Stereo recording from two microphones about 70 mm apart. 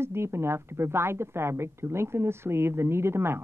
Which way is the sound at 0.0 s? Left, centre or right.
Right.